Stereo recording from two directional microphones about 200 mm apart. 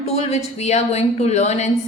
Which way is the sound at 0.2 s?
35° left (ahead or behind).